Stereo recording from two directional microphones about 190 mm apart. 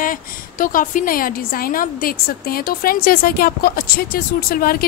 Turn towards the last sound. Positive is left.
turn(degrees=50)  # may be behind; listen again after turning